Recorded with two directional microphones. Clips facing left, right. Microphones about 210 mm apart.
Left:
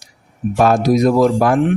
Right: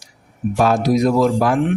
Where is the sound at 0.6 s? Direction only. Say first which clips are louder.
Left 3 dB; 50° left (ahead or behind).